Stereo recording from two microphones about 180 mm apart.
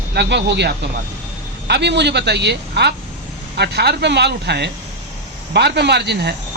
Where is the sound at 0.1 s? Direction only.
70° right (ahead or behind).